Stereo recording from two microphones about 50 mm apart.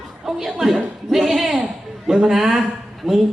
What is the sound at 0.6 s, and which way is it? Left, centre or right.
A man's voice, centre.